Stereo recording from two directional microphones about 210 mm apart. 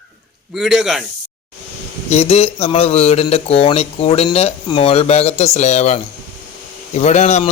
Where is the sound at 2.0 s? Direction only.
30° left (ahead or behind).